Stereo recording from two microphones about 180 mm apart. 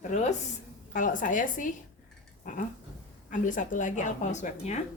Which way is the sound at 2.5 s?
45° left (ahead or behind).